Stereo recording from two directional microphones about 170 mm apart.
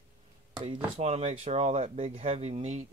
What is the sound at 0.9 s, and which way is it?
Speech, 40° right (ahead or behind).